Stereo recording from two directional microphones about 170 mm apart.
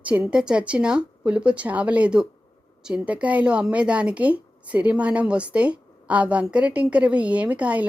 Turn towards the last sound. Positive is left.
turn(degrees=-10)  # may be behind; listen again after turning